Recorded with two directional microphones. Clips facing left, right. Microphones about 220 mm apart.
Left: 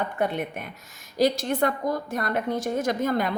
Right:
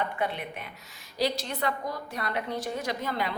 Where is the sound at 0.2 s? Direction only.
45° left (ahead or behind).